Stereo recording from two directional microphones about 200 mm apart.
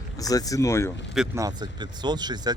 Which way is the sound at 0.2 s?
20° left (ahead or behind).